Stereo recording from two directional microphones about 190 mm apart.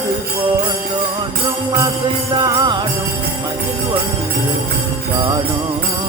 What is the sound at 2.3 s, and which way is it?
Jingle bell, 20° right (ahead or behind).